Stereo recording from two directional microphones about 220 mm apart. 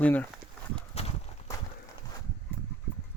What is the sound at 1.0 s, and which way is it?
Horse, 30° left (ahead or behind).